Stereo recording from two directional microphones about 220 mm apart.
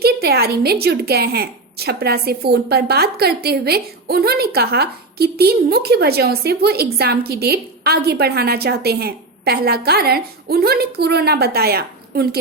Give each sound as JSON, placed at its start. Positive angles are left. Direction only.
{"t": 0.0, "sound": "a woman's voice", "side_deg": -45}